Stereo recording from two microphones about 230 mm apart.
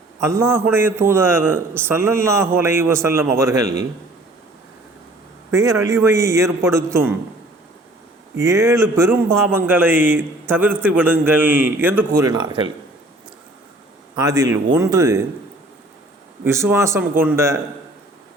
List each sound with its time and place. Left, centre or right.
0.2 s a man's voice: centre
5.5 s a man's voice: centre
8.4 s a man's voice: centre
14.2 s a man's voice: centre
16.4 s a man's voice: centre